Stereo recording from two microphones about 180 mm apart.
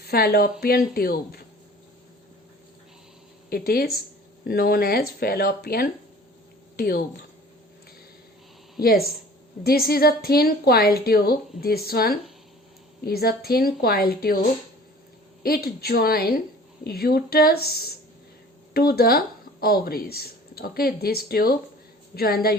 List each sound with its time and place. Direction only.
0.0 s a woman's voice: 60° left (ahead or behind)
3.5 s speech: 55° left (ahead or behind)
8.8 s speech: 55° left (ahead or behind)
15.4 s speech: 60° left (ahead or behind)